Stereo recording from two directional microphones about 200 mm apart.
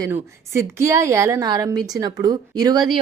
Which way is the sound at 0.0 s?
15° right (ahead or behind).